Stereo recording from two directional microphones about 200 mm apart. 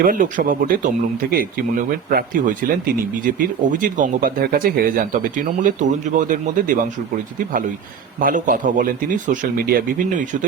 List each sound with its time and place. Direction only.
0.0 s speech: 45° right (ahead or behind)
8.2 s speech: 40° right (ahead or behind)